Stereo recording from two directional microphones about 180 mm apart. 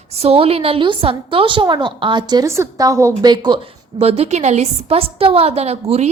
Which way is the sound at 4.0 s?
35° right (ahead or behind).